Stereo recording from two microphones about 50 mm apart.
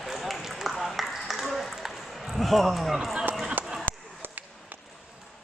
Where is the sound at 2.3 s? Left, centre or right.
Centre.